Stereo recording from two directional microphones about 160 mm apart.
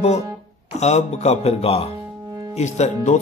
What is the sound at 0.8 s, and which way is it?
Mantra, 45° left (ahead or behind).